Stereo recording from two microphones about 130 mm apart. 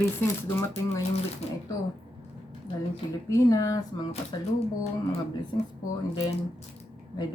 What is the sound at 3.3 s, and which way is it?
Speech, 25° left (ahead or behind).